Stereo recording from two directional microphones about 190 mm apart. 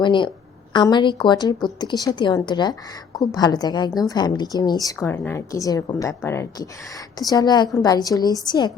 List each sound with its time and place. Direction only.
0.0 s a woman's voice: 25° left (ahead or behind)